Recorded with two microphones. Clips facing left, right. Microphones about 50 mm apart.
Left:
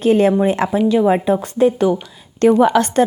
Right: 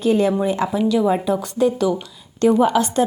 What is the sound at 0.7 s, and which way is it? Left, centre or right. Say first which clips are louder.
Speech: left 3 dB; left.